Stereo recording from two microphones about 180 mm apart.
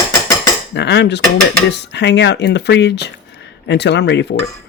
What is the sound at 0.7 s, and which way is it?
Speech, 70° left (ahead or behind).